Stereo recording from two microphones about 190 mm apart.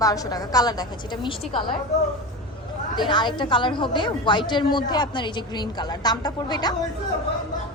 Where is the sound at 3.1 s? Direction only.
25° left (ahead or behind).